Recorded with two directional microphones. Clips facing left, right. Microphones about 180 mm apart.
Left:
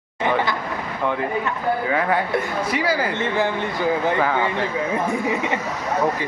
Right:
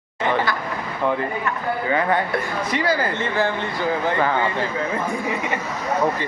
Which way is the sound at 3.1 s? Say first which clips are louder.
Left 1 dB; 20° left (ahead or behind).